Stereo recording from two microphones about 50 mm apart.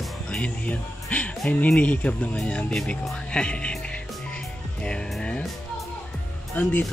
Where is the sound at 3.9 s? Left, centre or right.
Centre.